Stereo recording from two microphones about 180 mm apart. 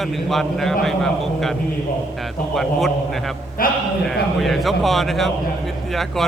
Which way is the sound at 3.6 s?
50° left (ahead or behind).